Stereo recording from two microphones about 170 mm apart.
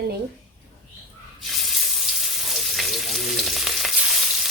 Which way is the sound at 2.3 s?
Centre (ahead or behind).